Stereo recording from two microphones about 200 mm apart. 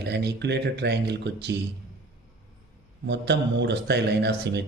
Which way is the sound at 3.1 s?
60° right (ahead or behind).